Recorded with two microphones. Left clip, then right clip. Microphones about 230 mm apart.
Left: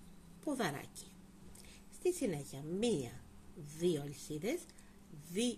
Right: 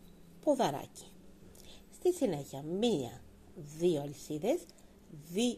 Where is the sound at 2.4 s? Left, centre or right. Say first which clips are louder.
Right 4 dB; centre.